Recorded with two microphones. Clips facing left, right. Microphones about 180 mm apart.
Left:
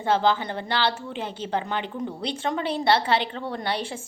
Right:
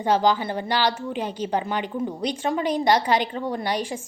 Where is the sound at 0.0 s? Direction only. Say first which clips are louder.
Right 2 dB; 15° right (ahead or behind).